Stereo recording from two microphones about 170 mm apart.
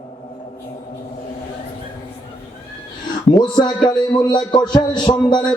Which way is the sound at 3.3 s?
25° left (ahead or behind).